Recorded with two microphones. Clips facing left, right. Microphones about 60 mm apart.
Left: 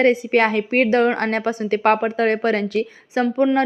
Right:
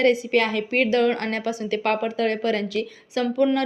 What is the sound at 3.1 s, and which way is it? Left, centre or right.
Speech, left.